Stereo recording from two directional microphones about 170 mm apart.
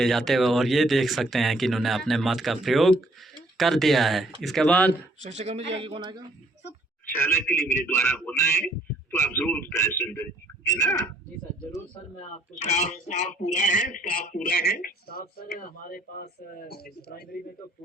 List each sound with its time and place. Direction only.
0.0 s speech: centre (ahead or behind)
5.2 s a man's voice: 40° right (ahead or behind); by 6.2 s 25° right (ahead or behind)
7.1 s a man's voice: 15° left (ahead or behind)
12.2 s speech: 40° left (ahead or behind); by 17.4 s 65° left (ahead or behind)